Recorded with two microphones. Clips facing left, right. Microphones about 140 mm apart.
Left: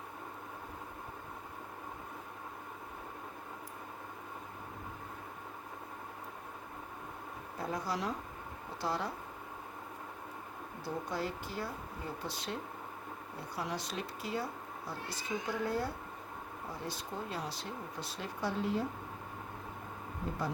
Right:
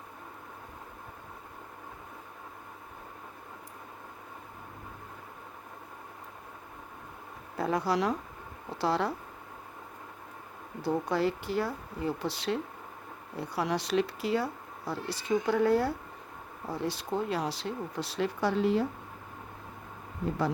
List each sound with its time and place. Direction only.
7.6 s speech: 75° right (ahead or behind)
10.8 s speech: 80° right